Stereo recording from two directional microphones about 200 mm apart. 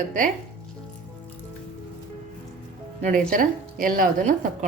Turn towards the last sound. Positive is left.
turn(degrees=-40)  # may be behind; listen again after turning